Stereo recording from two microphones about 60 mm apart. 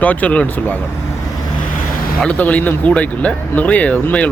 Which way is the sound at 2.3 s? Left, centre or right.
Left.